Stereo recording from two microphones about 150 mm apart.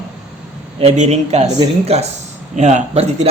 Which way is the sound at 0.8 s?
45° right (ahead or behind).